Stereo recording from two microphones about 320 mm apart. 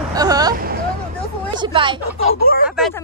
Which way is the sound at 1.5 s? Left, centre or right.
Centre.